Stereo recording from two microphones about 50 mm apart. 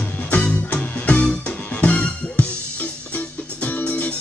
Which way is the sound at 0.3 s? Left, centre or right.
Left.